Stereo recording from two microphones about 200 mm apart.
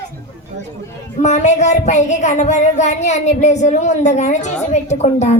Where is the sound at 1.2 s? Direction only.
35° left (ahead or behind).